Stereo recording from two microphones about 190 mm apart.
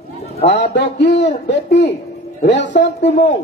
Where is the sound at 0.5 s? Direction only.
65° left (ahead or behind).